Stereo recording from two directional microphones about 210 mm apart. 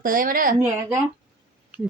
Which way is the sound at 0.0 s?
40° right (ahead or behind).